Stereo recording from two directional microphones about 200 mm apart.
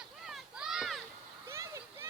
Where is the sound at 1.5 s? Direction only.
15° right (ahead or behind).